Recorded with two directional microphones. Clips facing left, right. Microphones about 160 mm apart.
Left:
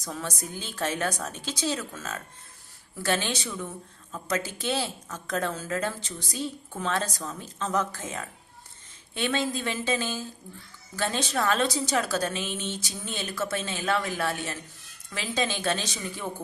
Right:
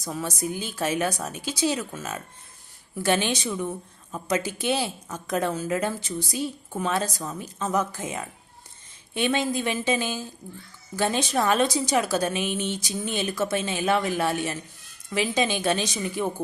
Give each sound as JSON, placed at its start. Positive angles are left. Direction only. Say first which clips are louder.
{"t": 0.0, "sound": "a woman's voice", "louder": "right 5 dB", "side_deg": -10}